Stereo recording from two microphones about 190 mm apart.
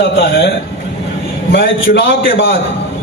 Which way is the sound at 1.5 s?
55° left (ahead or behind).